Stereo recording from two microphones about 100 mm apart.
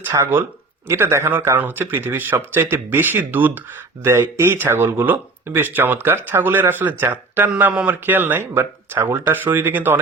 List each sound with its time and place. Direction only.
0.1 s speech: 40° right (ahead or behind)
0.9 s speech: 25° right (ahead or behind)